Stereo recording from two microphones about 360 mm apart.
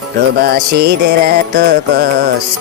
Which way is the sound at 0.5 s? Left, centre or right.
Right.